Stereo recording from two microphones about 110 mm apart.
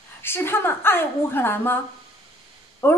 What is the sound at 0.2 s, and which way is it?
Speech, 20° left (ahead or behind).